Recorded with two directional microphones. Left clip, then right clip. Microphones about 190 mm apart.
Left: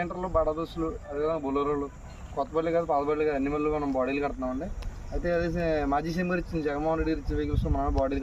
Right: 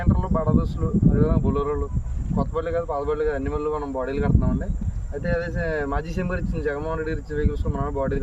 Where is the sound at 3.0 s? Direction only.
15° right (ahead or behind).